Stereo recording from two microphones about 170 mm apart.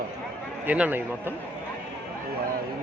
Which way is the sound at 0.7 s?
10° right (ahead or behind).